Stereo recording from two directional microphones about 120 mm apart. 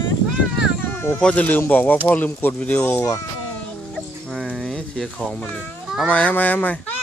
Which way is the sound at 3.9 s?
5° left (ahead or behind).